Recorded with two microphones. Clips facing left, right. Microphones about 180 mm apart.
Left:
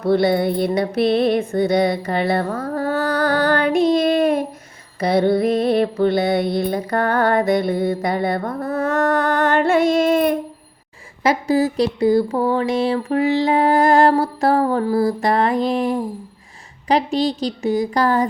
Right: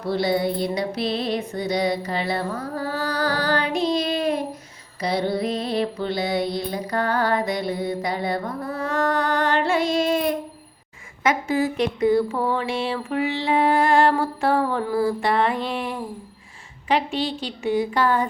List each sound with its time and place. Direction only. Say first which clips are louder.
0.0 s music: left 6 dB; 55° left (ahead or behind)
4.9 s mantra: left 7 dB; 55° left (ahead or behind)
11.2 s a sound: left 4 dB; 35° left (ahead or behind)